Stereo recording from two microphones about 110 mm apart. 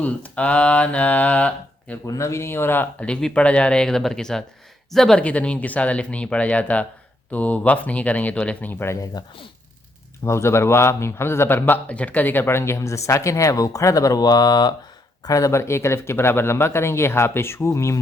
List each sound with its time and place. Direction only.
0.0 s speech: 15° left (ahead or behind)
2.0 s speech: 25° left (ahead or behind)
10.2 s a man's voice: 25° left (ahead or behind)